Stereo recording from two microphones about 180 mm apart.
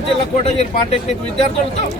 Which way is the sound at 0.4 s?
35° left (ahead or behind).